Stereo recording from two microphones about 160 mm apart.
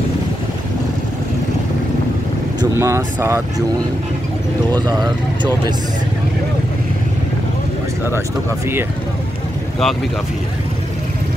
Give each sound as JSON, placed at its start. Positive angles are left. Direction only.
{"t": 2.6, "sound": "speech", "side_deg": -20}
{"t": 4.8, "sound": "speech", "side_deg": -25}